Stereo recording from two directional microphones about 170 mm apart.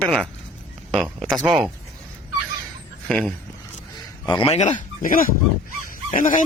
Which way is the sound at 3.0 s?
5° left (ahead or behind).